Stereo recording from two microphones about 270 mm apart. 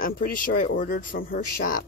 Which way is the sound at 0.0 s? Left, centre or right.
Left.